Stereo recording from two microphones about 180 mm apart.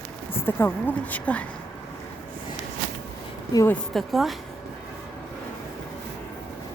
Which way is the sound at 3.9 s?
Centre (ahead or behind).